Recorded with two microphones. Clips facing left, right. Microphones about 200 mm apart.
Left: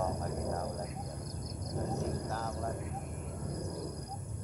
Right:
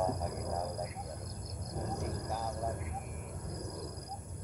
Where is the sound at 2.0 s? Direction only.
10° right (ahead or behind).